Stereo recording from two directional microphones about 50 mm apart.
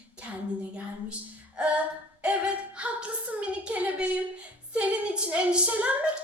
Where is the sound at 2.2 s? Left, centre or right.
Right.